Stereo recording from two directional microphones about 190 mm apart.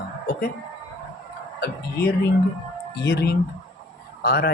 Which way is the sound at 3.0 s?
60° left (ahead or behind).